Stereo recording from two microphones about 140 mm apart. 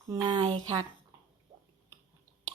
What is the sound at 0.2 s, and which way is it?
Speech, 35° right (ahead or behind).